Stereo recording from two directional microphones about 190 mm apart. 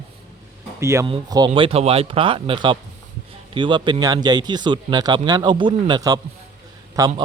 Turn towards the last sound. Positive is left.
turn(degrees=-20)  # may be behind; listen again after turning